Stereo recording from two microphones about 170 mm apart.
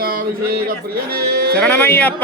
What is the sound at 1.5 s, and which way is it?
Speech, 10° left (ahead or behind).